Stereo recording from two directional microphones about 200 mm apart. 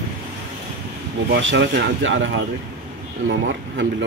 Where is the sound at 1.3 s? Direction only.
65° right (ahead or behind).